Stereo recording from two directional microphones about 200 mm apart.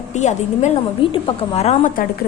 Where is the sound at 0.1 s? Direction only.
35° left (ahead or behind).